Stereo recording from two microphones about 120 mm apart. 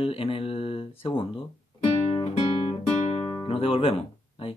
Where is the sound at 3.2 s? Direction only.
30° left (ahead or behind).